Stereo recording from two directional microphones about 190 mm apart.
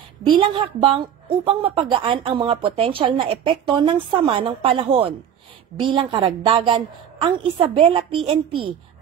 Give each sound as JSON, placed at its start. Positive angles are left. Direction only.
{"t": 0.2, "sound": "a woman's voice", "side_deg": -25}